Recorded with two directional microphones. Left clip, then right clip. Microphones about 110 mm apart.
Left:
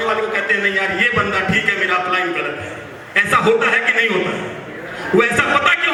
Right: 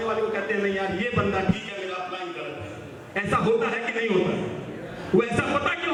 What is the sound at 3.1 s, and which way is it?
A man's voice, 30° left (ahead or behind).